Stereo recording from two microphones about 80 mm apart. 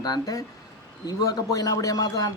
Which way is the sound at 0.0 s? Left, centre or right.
Left.